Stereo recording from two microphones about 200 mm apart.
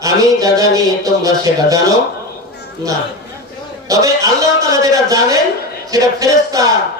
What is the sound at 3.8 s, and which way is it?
A man's voice, 15° right (ahead or behind).